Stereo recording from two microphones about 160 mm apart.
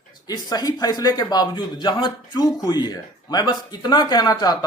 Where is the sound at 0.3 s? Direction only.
25° left (ahead or behind).